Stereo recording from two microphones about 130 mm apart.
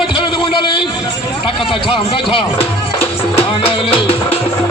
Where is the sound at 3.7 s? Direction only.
45° left (ahead or behind).